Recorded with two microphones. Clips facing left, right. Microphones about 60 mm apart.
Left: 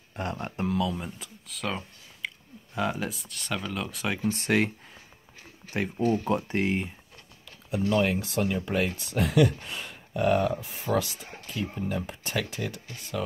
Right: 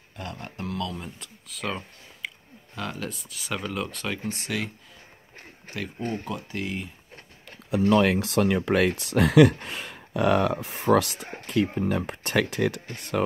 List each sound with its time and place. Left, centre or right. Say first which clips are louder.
0.1 s speech: left 4 dB; left
0.7 s speech: left 3 dB; centre
2.2 s a sound: left 1 dB; centre
2.7 s speech: left 4 dB; centre
3.1 s speech: even; centre
4.4 s speech: left 6 dB; left
5.7 s speech: left 4 dB; right
6.2 s speech: left 6 dB; left
7.9 s speech: right 4 dB; right
9.7 s speech: right 2 dB; right
11.4 s speech: right 8 dB; right
12.8 s speech: right 6 dB; right